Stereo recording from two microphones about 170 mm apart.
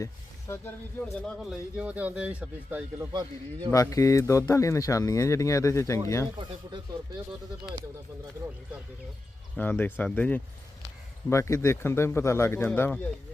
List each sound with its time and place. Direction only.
0.0 s speech: 15° left (ahead or behind); by 3.1 s 10° right (ahead or behind)
3.1 s a man's voice: 25° right (ahead or behind)
3.7 s speech: 20° left (ahead or behind)
9.6 s speech: 10° left (ahead or behind)